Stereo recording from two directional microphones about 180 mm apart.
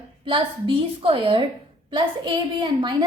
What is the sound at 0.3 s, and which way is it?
A woman's voice, 30° right (ahead or behind).